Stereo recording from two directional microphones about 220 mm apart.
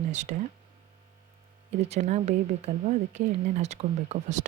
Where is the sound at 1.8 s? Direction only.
30° right (ahead or behind).